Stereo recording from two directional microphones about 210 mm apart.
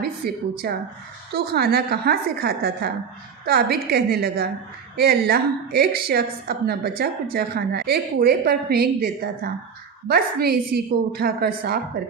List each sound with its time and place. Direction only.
0.2 s a woman's voice: 50° right (ahead or behind)